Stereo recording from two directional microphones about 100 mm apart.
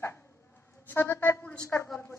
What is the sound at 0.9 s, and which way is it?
Speech, 25° left (ahead or behind).